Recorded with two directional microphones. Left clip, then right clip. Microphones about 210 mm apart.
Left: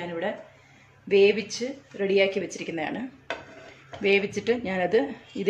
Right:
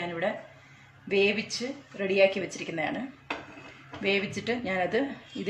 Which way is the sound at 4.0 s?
25° left (ahead or behind).